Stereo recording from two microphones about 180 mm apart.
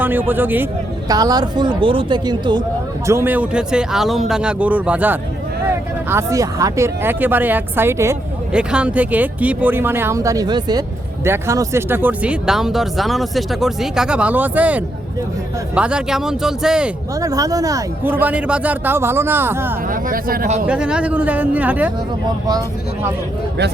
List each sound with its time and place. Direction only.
0.0 s a man's voice: 10° right (ahead or behind)
3.1 s speech: 10° right (ahead or behind)
17.2 s speech: 20° right (ahead or behind)
19.9 s speech: 50° right (ahead or behind)
20.7 s speech: 5° right (ahead or behind)